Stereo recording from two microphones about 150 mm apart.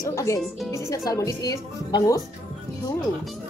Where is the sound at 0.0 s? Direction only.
20° left (ahead or behind).